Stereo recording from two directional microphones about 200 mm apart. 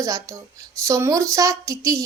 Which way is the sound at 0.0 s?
15° right (ahead or behind).